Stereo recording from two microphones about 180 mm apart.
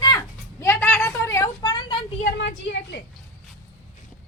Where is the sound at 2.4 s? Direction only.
75° left (ahead or behind).